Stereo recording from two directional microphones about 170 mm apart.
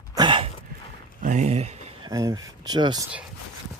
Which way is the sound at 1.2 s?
45° right (ahead or behind).